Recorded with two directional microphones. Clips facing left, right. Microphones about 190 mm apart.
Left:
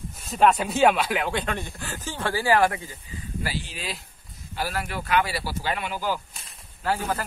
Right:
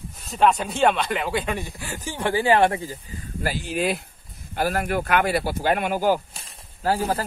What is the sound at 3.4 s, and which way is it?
Speech, 50° right (ahead or behind).